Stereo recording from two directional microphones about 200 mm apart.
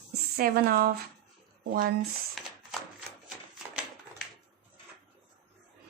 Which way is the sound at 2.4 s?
Centre (ahead or behind).